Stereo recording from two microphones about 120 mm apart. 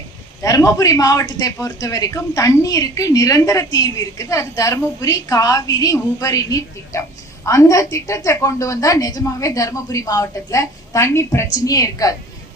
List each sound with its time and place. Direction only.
0.4 s a man's voice: 30° left (ahead or behind)